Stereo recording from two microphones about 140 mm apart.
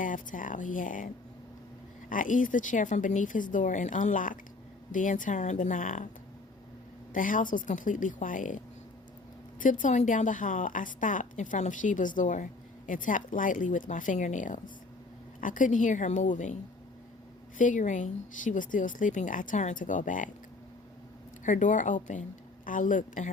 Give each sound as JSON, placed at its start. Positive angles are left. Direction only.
{"t": 0.0, "sound": "a woman's voice", "side_deg": 70}
{"t": 7.1, "sound": "a woman's voice", "side_deg": 70}
{"t": 17.6, "sound": "a woman's voice", "side_deg": 65}
{"t": 21.4, "sound": "a woman's voice", "side_deg": 65}